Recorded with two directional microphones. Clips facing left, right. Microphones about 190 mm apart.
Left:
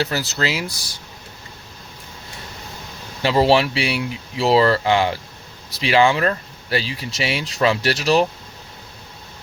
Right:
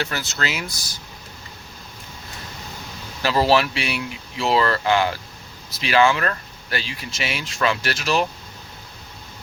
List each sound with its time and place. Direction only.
0.0 s speech: 35° left (ahead or behind)
3.2 s speech: 25° left (ahead or behind)